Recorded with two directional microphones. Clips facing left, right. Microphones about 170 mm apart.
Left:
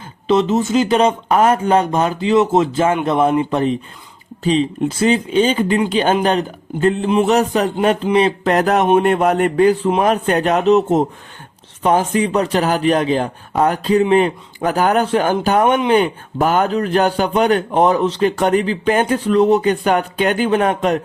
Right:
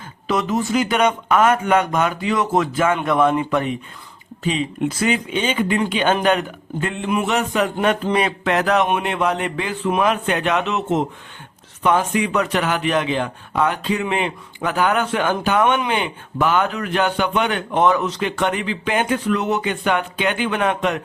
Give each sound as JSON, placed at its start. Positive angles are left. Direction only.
{"t": 0.3, "sound": "a man's voice", "side_deg": 25}